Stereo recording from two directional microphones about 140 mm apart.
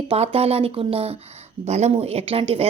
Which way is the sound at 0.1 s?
45° right (ahead or behind).